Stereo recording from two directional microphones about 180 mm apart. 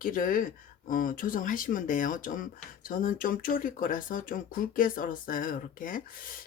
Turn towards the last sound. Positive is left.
turn(degrees=50)  # may be behind; listen again after turning